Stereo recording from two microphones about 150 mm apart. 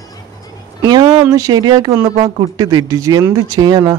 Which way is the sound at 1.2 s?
20° right (ahead or behind).